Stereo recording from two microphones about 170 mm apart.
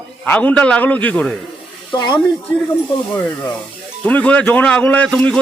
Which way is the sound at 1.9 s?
25° left (ahead or behind).